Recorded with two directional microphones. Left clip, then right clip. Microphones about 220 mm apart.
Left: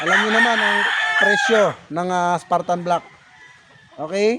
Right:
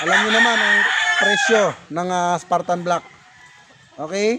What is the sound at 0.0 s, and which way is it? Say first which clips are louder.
Chicken: even; 35° left (ahead or behind).